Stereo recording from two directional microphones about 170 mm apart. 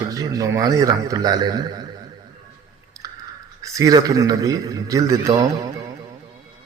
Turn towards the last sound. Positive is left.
turn(degrees=-20)  # may be behind; listen again after turning